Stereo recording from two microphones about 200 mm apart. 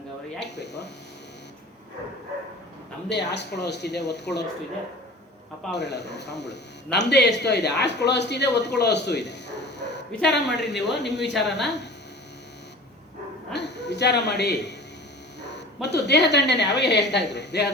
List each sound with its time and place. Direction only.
0.3 s speech: 60° left (ahead or behind)
3.1 s speech: 60° left (ahead or behind)
5.7 s speech: 60° left (ahead or behind)
13.5 s a sound: 60° left (ahead or behind)
15.4 s speech: 60° left (ahead or behind)